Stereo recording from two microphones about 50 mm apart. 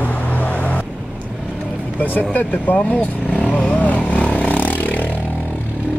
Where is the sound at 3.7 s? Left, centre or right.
Left.